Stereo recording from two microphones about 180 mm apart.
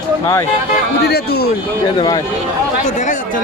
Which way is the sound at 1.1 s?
60° left (ahead or behind).